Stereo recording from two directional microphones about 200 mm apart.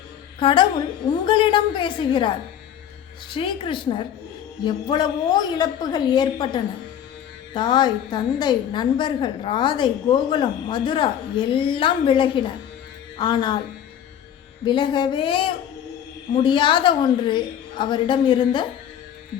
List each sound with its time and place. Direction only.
0.3 s a woman's voice: 25° left (ahead or behind)
14.6 s a woman's voice: 25° left (ahead or behind)